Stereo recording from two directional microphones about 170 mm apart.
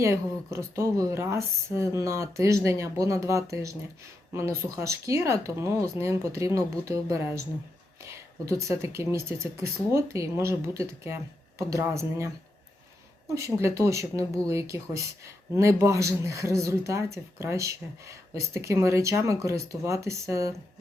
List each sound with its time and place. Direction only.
0.0 s speech: 15° right (ahead or behind)